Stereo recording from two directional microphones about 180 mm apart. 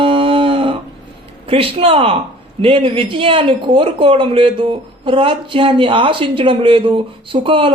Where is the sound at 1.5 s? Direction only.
30° right (ahead or behind).